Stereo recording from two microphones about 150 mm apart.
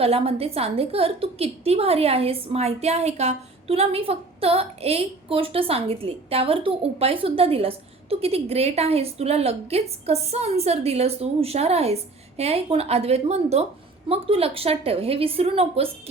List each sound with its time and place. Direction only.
0.0 s a woman's voice: 40° right (ahead or behind)